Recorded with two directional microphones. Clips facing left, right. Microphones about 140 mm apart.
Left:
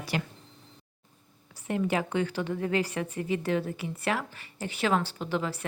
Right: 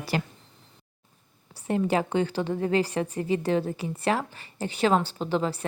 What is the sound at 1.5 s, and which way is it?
A woman's voice, 30° right (ahead or behind).